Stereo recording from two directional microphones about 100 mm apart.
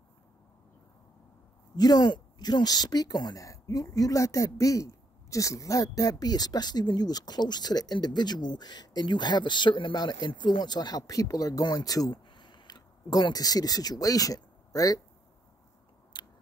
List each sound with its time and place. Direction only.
1.8 s speech: 45° left (ahead or behind)
16.1 s biting: 45° left (ahead or behind)